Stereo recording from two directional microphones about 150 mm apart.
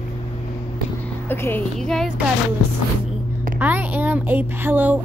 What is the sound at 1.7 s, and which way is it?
Speech, centre (ahead or behind).